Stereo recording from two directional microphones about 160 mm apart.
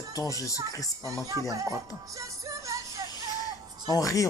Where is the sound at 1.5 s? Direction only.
20° right (ahead or behind).